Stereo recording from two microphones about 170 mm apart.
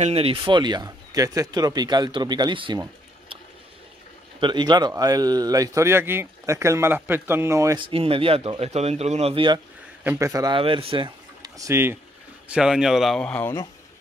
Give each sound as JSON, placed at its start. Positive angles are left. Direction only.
{"t": 0.0, "sound": "speech", "side_deg": -35}
{"t": 4.4, "sound": "a man's voice", "side_deg": -25}
{"t": 7.8, "sound": "speech", "side_deg": -35}
{"t": 10.0, "sound": "speech", "side_deg": -15}